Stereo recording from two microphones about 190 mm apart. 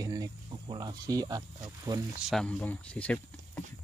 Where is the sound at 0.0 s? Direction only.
20° right (ahead or behind).